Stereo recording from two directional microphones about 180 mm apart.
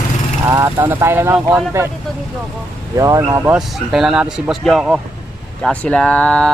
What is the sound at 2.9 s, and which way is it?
Speech, 20° right (ahead or behind).